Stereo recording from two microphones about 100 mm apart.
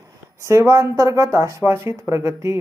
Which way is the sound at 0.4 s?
30° right (ahead or behind).